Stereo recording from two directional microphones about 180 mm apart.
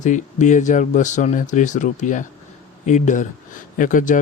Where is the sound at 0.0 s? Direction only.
45° left (ahead or behind).